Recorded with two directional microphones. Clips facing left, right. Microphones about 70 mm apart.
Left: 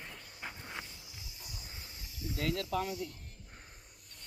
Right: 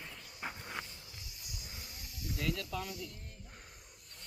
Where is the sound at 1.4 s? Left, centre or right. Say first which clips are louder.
Even; left.